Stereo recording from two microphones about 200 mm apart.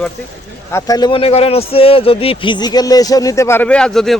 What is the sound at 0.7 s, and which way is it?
Speech, 20° left (ahead or behind).